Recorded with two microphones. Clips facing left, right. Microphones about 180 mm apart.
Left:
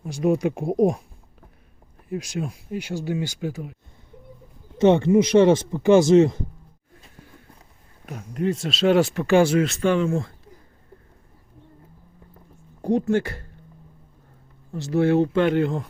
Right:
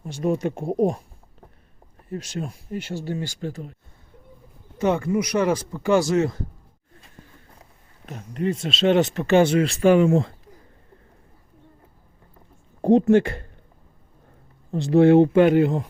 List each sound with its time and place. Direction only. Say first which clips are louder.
0.0 s speech: left 2 dB; 10° left (ahead or behind)
2.0 s speech: left 2 dB; 5° left (ahead or behind)
4.8 s speech: left 6 dB; 25° left (ahead or behind)
8.0 s speech: left 1 dB; 5° left (ahead or behind)
9.8 s speech: right 10 dB; 15° right (ahead or behind)
12.8 s speech: right 5 dB; 20° right (ahead or behind)
15.0 s speech: right 5 dB; 20° right (ahead or behind)